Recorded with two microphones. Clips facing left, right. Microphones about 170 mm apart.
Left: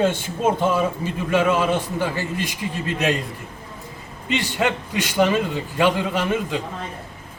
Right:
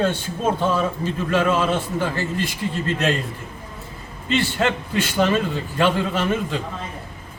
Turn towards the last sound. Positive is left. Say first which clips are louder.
# even
turn(degrees=15)  # may be behind; listen again after turning